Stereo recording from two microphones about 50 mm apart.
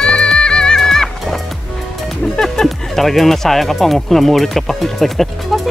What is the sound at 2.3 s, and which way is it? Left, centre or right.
Speech, centre.